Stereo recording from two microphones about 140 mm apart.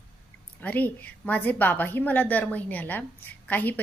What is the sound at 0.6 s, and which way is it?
A woman's voice, 10° left (ahead or behind).